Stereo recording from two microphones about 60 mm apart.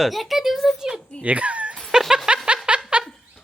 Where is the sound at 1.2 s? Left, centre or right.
Right.